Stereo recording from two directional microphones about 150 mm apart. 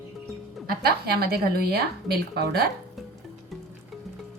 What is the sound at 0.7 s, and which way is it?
A woman's voice, 90° right.